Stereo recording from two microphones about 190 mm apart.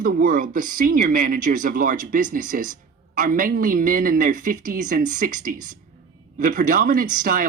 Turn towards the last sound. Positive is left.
turn(degrees=-45)  # may be behind; listen again after turning